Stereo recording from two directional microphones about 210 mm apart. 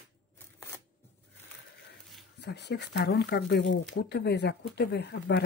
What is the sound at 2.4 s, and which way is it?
Speech, 55° left (ahead or behind).